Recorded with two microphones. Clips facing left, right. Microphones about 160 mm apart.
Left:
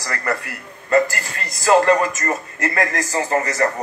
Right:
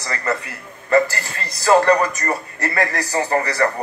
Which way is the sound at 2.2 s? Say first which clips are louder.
Even; 35° right (ahead or behind).